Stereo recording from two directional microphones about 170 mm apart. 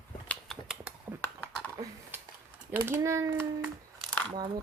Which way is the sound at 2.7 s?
15° right (ahead or behind).